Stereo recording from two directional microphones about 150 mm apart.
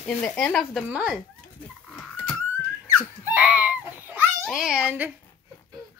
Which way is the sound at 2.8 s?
15° right (ahead or behind).